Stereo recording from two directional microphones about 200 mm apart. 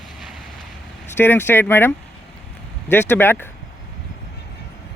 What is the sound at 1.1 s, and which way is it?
Speech, 10° left (ahead or behind).